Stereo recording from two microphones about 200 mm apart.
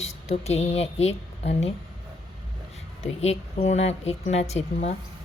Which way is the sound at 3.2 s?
35° left (ahead or behind).